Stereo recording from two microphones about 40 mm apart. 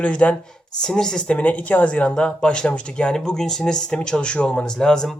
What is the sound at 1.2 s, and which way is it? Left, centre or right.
Speech, left.